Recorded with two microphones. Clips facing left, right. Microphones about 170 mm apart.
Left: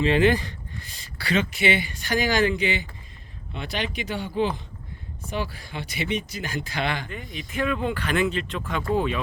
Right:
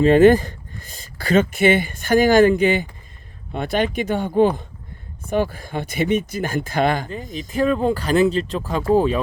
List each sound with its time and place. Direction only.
0.0 s speech: 45° right (ahead or behind)